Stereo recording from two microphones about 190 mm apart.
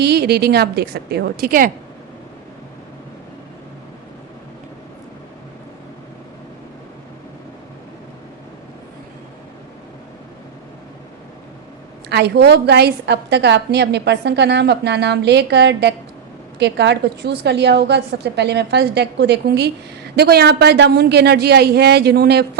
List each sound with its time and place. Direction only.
0.0 s a woman's voice: 60° right (ahead or behind)
12.0 s a woman's voice: 60° right (ahead or behind)